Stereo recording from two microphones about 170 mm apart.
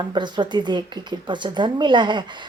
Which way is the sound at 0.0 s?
25° right (ahead or behind).